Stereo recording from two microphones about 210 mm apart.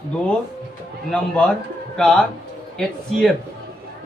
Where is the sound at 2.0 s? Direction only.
5° left (ahead or behind).